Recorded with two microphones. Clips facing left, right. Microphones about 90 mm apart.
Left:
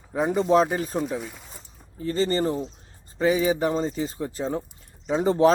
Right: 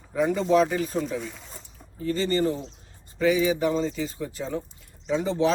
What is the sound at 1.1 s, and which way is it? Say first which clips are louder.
Speech: left 1 dB; 10° left (ahead or behind).